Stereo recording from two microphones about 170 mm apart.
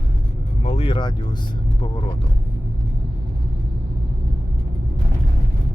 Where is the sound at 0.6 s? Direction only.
35° left (ahead or behind).